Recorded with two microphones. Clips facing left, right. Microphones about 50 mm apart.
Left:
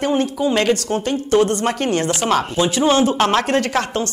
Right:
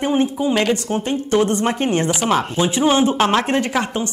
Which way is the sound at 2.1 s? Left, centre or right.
Centre.